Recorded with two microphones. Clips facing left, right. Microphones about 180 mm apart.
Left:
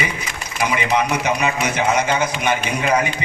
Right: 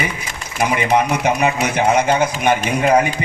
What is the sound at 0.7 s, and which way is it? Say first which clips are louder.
A man's voice: right 3 dB; 55° right (ahead or behind).